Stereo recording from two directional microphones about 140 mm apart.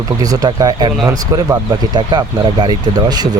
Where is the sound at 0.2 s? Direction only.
25° right (ahead or behind).